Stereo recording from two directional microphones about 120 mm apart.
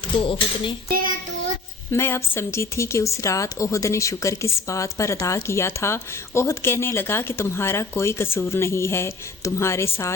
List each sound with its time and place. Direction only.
0.3 s speech: 45° left (ahead or behind)
1.9 s speech: 20° left (ahead or behind)